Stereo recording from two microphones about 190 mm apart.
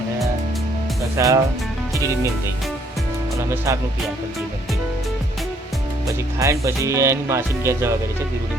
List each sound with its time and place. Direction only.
1.1 s speech: 15° right (ahead or behind)
6.4 s speech: 15° right (ahead or behind)